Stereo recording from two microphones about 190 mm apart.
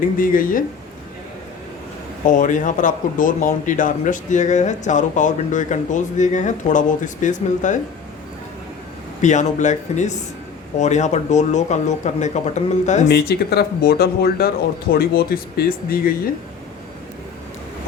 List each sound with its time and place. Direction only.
0.2 s speech: 45° left (ahead or behind)
2.2 s speech: 45° left (ahead or behind)
9.2 s speech: 40° left (ahead or behind)
13.1 s speech: 60° left (ahead or behind)